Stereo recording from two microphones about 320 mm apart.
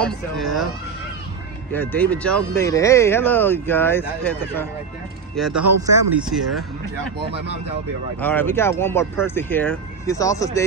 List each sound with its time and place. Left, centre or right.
0.0 s speech: centre
1.8 s speech: centre
5.5 s speech: right
6.1 s speech: centre
8.2 s speech: centre